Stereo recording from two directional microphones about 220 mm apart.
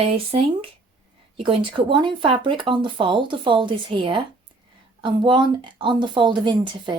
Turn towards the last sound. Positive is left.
turn(degrees=-20)  # may be behind; listen again after turning